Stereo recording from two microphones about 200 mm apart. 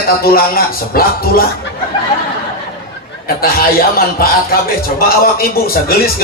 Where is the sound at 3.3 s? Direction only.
50° left (ahead or behind).